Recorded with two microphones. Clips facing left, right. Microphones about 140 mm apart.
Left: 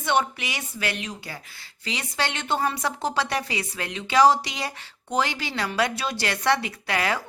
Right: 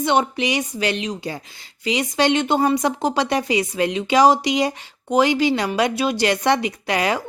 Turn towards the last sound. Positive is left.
turn(degrees=-20)  # may be behind; listen again after turning